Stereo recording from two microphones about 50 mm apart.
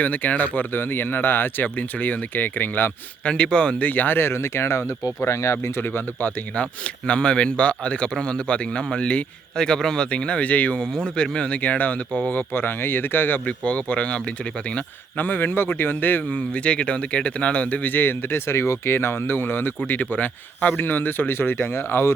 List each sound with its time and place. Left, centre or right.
0.0 s speech: left
0.7 s speech: left
3.2 s a man's voice: left
3.8 s speech: left
5.2 s speech: left
7.1 s a man's voice: left
10.8 s a man's voice: centre; by 13.4 s left
13.7 s a man's voice: left
15.2 s speech: left
16.3 s a man's voice: left
17.8 s speech: left